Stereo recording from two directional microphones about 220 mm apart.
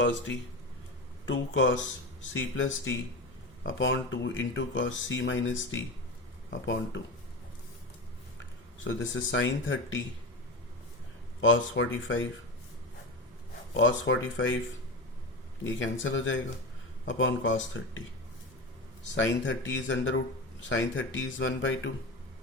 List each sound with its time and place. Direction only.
0.0 s speech: 55° left (ahead or behind)
8.8 s speech: 60° left (ahead or behind)
11.3 s speech: 60° left (ahead or behind)
13.7 s speech: 60° left (ahead or behind)
15.6 s speech: 60° left (ahead or behind)
19.1 s speech: 55° left (ahead or behind)